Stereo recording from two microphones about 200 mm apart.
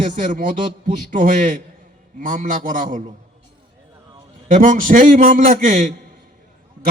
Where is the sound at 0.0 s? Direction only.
40° right (ahead or behind).